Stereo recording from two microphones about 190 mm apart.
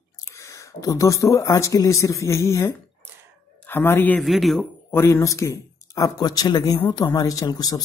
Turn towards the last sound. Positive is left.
turn(degrees=20)  # may be behind; listen again after turning